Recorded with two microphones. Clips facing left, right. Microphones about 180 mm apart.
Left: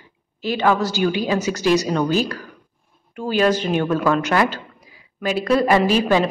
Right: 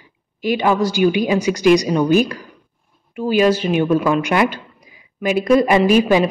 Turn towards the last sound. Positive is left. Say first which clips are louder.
# right 4 dB
turn(degrees=-15)  # may be behind; listen again after turning